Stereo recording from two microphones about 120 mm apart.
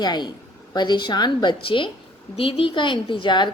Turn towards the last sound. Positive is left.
turn(degrees=40)  # may be behind; listen again after turning